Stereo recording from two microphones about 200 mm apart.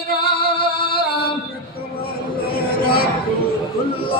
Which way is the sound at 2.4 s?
50° left (ahead or behind).